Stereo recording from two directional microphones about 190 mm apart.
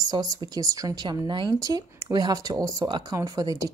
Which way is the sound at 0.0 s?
20° right (ahead or behind).